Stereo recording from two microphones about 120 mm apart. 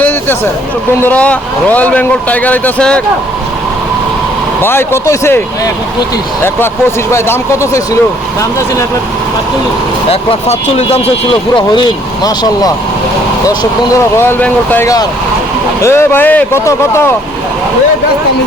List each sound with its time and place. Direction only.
1.0 s a man's voice: 10° left (ahead or behind)
4.6 s speech: 20° left (ahead or behind)
7.1 s speech: 25° left (ahead or behind)
12.2 s speech: 30° left (ahead or behind)
14.2 s a man's voice: 15° left (ahead or behind)